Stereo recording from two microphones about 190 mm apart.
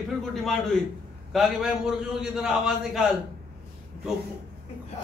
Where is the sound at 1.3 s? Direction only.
Centre (ahead or behind).